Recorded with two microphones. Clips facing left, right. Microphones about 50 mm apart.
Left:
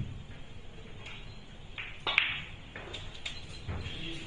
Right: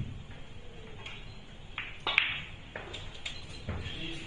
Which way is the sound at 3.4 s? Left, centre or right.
Right.